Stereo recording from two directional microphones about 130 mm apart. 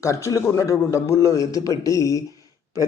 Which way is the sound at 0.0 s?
25° left (ahead or behind).